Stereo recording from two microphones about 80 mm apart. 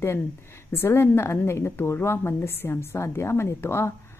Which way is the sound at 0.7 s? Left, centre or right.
Left.